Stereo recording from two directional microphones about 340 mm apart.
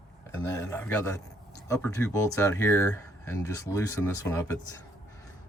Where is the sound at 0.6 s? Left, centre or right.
Centre.